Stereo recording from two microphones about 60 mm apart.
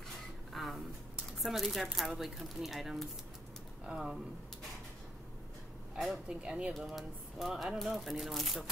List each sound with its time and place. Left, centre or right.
0.5 s a sound: centre
1.4 s speech: centre
6.2 s speech: centre
7.0 s speech: centre